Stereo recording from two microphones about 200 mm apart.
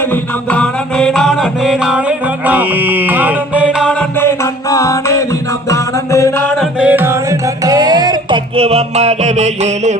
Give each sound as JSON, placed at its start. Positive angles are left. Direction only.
{"t": 0.5, "sound": "music", "side_deg": 5}
{"t": 4.2, "sound": "music", "side_deg": 15}
{"t": 6.6, "sound": "music", "side_deg": -5}